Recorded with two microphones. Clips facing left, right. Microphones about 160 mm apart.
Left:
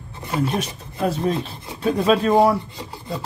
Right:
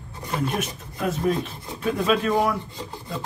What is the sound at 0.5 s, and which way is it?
Speech, 35° left (ahead or behind).